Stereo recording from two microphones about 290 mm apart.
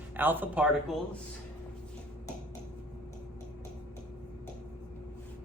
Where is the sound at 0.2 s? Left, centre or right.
Centre.